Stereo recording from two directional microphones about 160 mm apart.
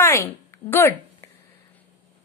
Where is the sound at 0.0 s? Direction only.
15° left (ahead or behind).